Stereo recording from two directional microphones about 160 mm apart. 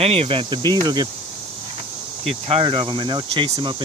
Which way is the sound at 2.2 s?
35° right (ahead or behind).